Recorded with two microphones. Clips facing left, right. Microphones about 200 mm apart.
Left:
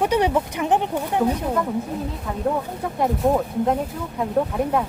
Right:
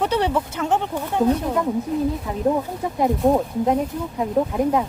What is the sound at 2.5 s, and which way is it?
Speech, 20° right (ahead or behind).